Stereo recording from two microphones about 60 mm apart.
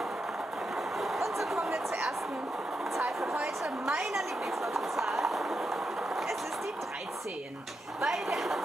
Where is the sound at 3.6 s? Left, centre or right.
Centre.